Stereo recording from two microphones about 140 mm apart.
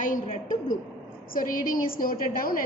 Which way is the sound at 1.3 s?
80° left.